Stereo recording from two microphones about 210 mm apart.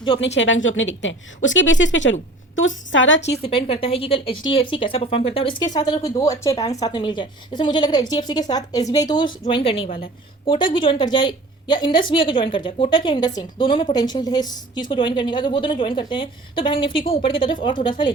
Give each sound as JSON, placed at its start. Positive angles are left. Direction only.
{"t": 0.2, "sound": "a woman's voice", "side_deg": 60}
{"t": 3.4, "sound": "speech", "side_deg": 25}